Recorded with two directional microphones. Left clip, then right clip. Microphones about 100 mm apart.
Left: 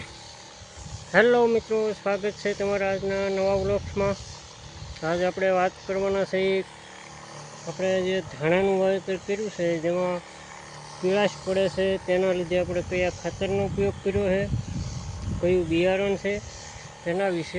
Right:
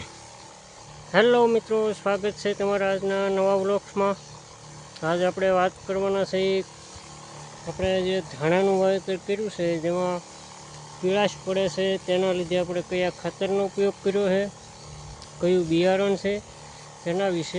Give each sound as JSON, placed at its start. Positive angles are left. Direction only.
{"t": 1.1, "sound": "speech", "side_deg": -15}
{"t": 4.9, "sound": "speech", "side_deg": -20}
{"t": 5.9, "sound": "speech", "side_deg": -10}
{"t": 7.8, "sound": "speech", "side_deg": -15}
{"t": 11.0, "sound": "speech", "side_deg": -5}
{"t": 15.4, "sound": "speech", "side_deg": -30}